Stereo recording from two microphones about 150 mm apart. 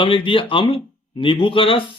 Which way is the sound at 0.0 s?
35° left (ahead or behind).